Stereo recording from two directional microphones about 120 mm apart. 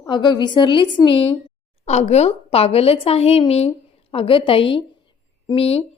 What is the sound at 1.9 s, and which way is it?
A woman's voice, 65° left (ahead or behind).